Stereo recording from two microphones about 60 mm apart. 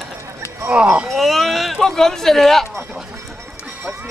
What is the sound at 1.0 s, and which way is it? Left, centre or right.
Speech, centre.